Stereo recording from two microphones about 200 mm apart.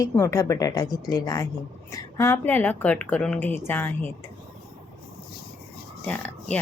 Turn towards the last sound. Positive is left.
turn(degrees=5)  # may be behind; listen again after turning